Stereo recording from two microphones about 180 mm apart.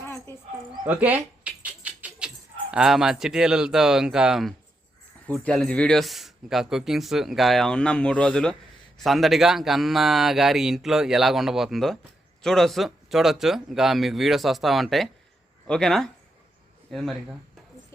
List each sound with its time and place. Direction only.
0.0 s dog: 15° left (ahead or behind)
0.9 s rodents: 10° right (ahead or behind)
2.7 s a man's voice: 5° right (ahead or behind)